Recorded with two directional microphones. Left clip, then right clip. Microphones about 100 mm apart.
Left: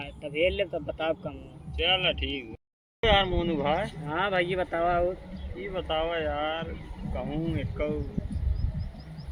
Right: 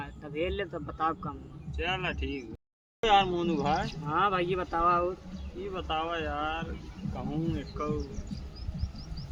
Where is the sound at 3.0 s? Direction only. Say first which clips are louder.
Left 1 dB; 35° right (ahead or behind).